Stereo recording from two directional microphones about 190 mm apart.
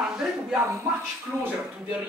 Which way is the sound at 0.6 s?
15° right (ahead or behind).